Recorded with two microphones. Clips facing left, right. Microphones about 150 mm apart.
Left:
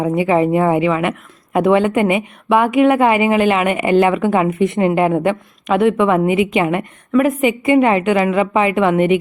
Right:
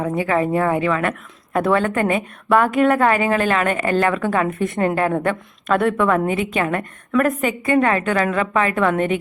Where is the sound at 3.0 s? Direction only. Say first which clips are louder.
Left 4 dB; 15° left (ahead or behind).